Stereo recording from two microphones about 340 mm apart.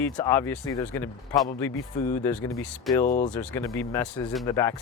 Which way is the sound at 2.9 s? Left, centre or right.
Left.